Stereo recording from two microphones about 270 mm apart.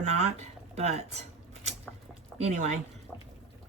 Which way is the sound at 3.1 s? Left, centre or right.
Centre.